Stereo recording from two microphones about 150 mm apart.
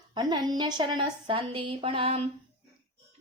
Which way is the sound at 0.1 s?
30° right (ahead or behind).